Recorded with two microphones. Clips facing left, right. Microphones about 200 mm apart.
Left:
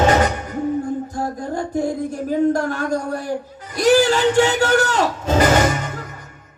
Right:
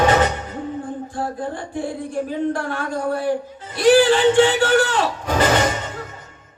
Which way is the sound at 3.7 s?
40° left (ahead or behind).